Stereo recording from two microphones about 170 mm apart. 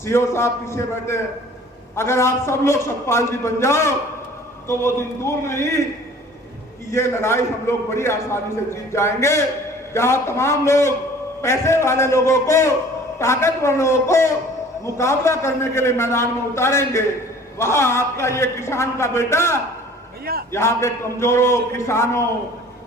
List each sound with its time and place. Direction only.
0.0 s a man's voice: 15° left (ahead or behind)
6.9 s a man's voice: 15° left (ahead or behind)